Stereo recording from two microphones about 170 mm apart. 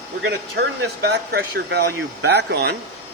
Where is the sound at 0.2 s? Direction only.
80° right.